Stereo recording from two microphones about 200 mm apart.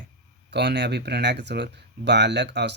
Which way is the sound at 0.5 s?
55° right (ahead or behind).